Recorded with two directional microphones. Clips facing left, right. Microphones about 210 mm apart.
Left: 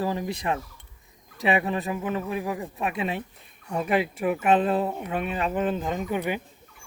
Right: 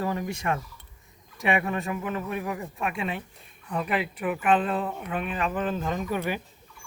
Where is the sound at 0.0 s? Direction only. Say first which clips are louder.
Left 1 dB; 25° left (ahead or behind).